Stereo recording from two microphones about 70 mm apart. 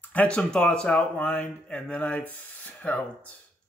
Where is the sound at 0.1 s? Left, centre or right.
Centre.